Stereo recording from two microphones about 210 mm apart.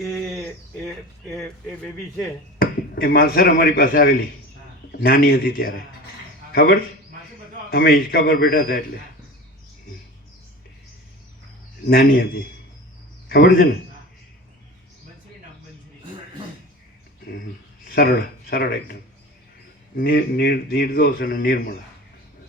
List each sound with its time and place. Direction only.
0.0 s a sound: centre (ahead or behind)
2.6 s a man's voice: 45° left (ahead or behind)
11.9 s a man's voice: 45° left (ahead or behind)
17.8 s speech: 45° left (ahead or behind)
20.0 s speech: 45° left (ahead or behind)